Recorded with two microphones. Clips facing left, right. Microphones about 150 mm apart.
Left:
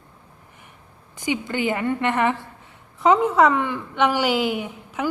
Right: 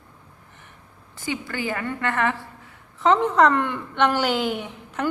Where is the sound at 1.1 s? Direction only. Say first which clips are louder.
Left 4 dB; 15° left (ahead or behind).